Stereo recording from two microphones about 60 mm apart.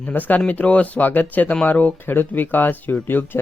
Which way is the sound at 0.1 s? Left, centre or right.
Left.